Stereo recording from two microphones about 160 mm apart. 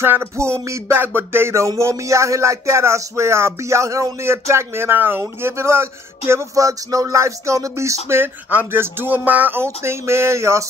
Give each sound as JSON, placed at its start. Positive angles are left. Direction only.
{"t": 0.0, "sound": "music", "side_deg": -15}